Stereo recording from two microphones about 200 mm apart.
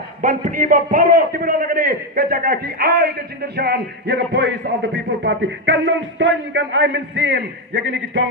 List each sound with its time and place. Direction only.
0.2 s a man's voice: 40° right (ahead or behind); by 8.2 s 65° right (ahead or behind)